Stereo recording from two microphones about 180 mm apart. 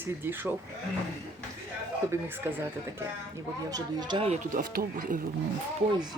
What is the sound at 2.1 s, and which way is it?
Speech, 15° right (ahead or behind).